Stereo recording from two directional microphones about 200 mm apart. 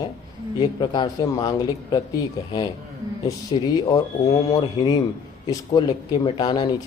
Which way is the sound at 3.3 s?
20° left (ahead or behind).